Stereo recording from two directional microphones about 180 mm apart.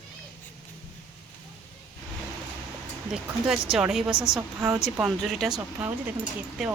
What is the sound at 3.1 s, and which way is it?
A woman's voice, 5° right (ahead or behind).